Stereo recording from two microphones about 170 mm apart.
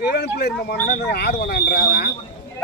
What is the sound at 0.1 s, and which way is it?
Speech, 70° left (ahead or behind).